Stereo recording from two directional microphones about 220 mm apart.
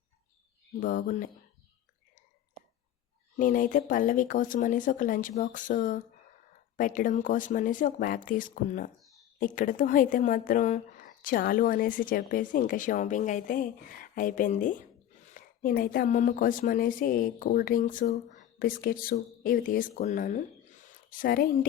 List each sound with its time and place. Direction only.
0.8 s a woman's voice: 40° left (ahead or behind)
3.3 s a woman's voice: 35° left (ahead or behind)